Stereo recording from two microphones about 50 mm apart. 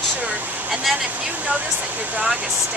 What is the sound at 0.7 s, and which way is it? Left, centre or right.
Vehicle, centre.